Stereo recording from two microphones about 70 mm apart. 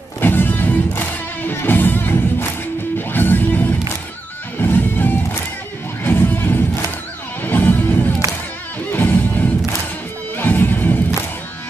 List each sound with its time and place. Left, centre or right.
0.2 s music: left